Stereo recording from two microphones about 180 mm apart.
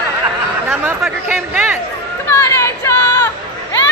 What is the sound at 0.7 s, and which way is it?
Chatter, 5° right (ahead or behind).